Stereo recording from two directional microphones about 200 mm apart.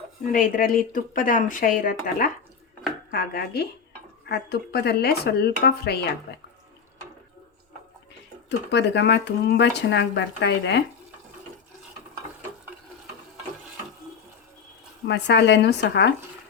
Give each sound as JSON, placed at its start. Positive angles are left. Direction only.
{"t": 0.3, "sound": "speech", "side_deg": 45}
{"t": 8.4, "sound": "speech", "side_deg": 60}
{"t": 15.0, "sound": "speech", "side_deg": 60}